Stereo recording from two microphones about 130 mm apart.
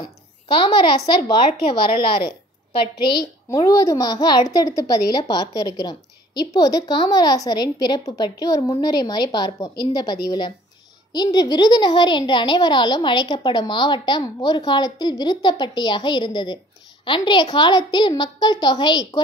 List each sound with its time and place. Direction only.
0.5 s a woman's voice: 40° left (ahead or behind)
3.4 s a woman's voice: 25° left (ahead or behind)